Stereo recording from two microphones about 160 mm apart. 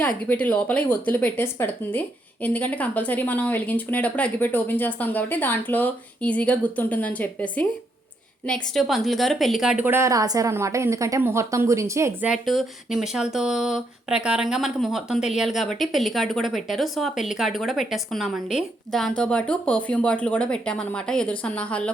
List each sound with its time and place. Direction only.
0.0 s speech: 10° left (ahead or behind); by 12.3 s 20° right (ahead or behind)
12.3 s speech: centre (ahead or behind)